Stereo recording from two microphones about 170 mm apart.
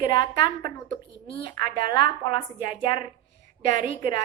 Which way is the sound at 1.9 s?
25° left (ahead or behind).